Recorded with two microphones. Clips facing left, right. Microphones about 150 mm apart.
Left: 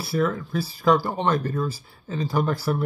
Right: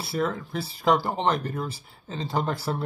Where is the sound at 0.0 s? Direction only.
25° right (ahead or behind).